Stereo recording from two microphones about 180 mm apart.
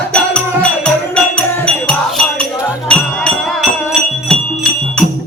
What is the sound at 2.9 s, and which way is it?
Music, 5° left (ahead or behind).